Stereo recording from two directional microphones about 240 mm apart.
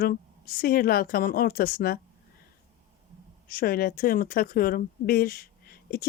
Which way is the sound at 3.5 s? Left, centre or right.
Left.